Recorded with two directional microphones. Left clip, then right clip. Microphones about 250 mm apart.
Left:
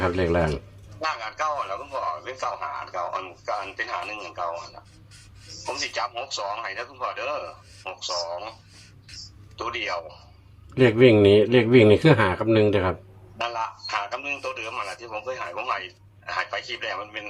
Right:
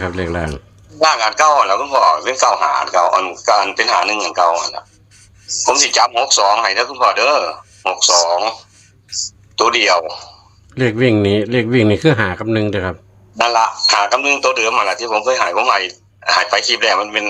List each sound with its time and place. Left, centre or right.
0.0 s a man's voice: right
9.6 s a man's voice: right
10.8 s speech: right
13.4 s a man's voice: right